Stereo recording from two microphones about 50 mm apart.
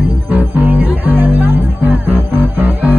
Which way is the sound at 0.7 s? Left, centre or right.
Right.